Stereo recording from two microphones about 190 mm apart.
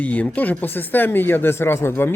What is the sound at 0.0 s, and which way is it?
Speech, 10° left (ahead or behind).